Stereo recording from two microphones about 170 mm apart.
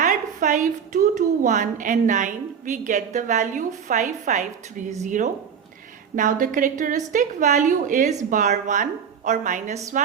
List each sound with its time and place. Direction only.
0.0 s a woman's voice: 50° right (ahead or behind)